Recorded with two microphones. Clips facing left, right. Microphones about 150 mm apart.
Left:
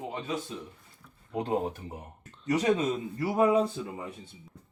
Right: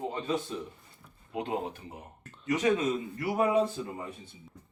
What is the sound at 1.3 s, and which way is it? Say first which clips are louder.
Speech: left 3 dB; 40° left (ahead or behind).